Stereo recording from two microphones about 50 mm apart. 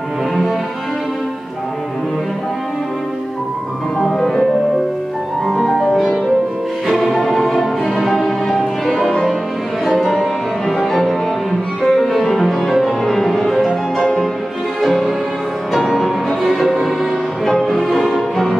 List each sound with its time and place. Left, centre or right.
4.2 s music: centre
5.6 s music: centre